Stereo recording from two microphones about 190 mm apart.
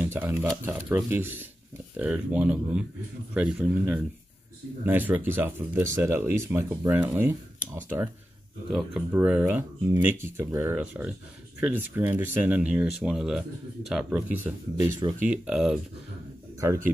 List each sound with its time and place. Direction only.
0.0 s speech: 10° right (ahead or behind)
14.8 s speech: 25° right (ahead or behind)
15.2 s speech: 5° right (ahead or behind)
16.5 s a man's voice: 15° right (ahead or behind)